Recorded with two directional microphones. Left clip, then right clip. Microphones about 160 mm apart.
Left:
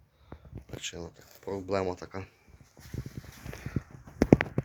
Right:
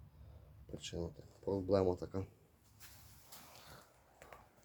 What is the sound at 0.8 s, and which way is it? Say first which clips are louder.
Speech: left 5 dB; 15° left (ahead or behind).